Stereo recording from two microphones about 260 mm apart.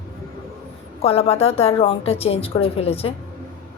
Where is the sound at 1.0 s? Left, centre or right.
Left.